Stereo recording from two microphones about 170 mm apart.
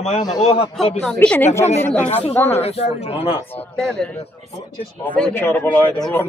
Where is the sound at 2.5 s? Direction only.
35° left (ahead or behind).